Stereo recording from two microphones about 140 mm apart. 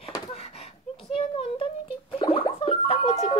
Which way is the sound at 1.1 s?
40° left (ahead or behind).